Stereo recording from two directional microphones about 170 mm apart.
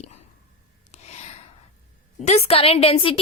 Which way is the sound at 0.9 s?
40° left (ahead or behind).